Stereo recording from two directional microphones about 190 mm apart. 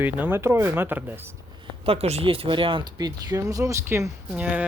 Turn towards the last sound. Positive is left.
turn(degrees=-5)  # may be behind; listen again after turning